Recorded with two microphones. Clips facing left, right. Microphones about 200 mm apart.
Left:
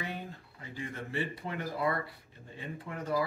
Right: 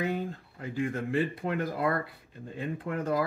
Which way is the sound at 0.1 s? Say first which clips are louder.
Right 9 dB; 50° right (ahead or behind).